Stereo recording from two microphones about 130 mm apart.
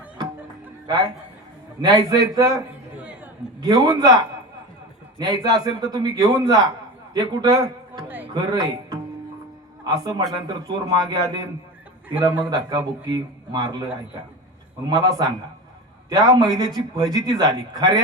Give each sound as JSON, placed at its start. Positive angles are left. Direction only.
{"t": 1.8, "sound": "a man's voice", "side_deg": -30}
{"t": 3.6, "sound": "a man's voice", "side_deg": -30}
{"t": 8.0, "sound": "a sound", "side_deg": -15}
{"t": 8.3, "sound": "a man's voice", "side_deg": -30}
{"t": 12.5, "sound": "a man's voice", "side_deg": -30}
{"t": 14.8, "sound": "a man's voice", "side_deg": -30}